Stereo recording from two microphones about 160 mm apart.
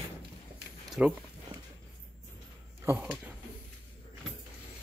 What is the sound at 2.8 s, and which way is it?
Speech, 10° right (ahead or behind).